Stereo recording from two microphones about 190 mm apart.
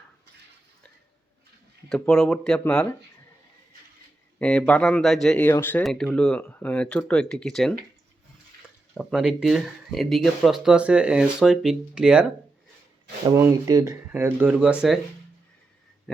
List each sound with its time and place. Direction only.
1.9 s speech: 5° left (ahead or behind)
4.4 s speech: 5° left (ahead or behind)
9.0 s speech: centre (ahead or behind)
13.2 s speech: 15° right (ahead or behind)